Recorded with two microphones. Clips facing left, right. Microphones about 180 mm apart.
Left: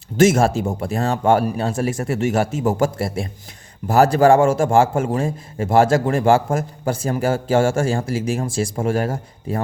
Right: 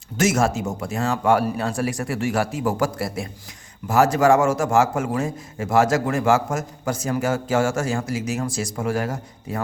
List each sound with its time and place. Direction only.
0.2 s a man's voice: 30° left (ahead or behind)